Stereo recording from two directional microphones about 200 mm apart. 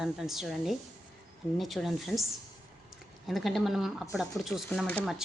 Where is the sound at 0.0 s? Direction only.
Centre (ahead or behind).